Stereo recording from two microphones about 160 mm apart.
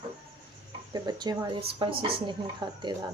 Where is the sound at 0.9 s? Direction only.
25° right (ahead or behind).